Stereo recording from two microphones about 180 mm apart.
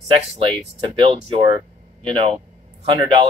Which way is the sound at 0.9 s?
30° right (ahead or behind).